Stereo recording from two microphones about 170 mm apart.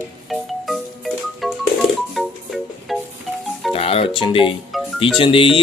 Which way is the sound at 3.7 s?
35° left (ahead or behind).